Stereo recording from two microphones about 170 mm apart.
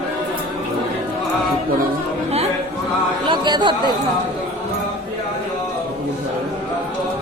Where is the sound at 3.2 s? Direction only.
25° right (ahead or behind).